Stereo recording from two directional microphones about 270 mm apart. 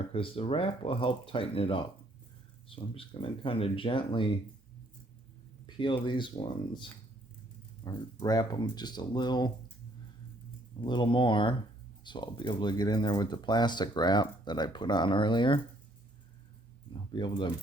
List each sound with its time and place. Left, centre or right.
0.1 s speech: centre
5.6 s speech: centre
7.9 s speech: centre
10.8 s speech: centre
17.1 s speech: centre